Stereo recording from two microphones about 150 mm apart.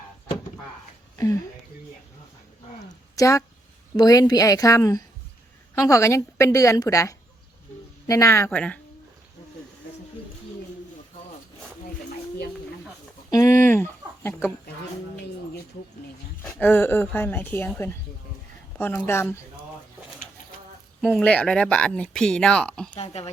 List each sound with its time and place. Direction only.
3.2 s a woman's voice: 20° left (ahead or behind)
8.4 s speech: 10° left (ahead or behind)
13.3 s speech: 20° left (ahead or behind)
16.4 s speech: 10° left (ahead or behind)
18.8 s speech: 15° left (ahead or behind)
21.0 s speech: 10° left (ahead or behind)
22.9 s speech: 45° left (ahead or behind)